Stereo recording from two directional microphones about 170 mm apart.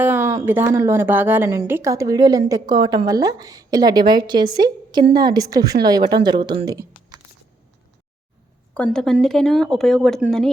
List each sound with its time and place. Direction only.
0.0 s a woman's voice: 15° right (ahead or behind)
8.7 s a woman's voice: 5° left (ahead or behind)